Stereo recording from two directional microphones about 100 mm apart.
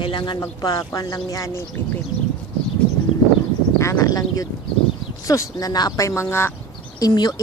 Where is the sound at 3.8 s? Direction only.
35° left (ahead or behind).